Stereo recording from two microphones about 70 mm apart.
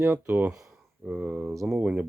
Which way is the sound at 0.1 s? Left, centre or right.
Centre.